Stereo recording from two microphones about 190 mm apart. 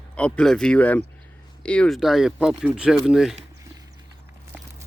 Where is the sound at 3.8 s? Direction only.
20° right (ahead or behind).